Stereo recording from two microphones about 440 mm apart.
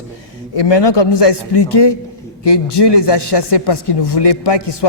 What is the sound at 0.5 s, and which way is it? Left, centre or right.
A man's voice, left.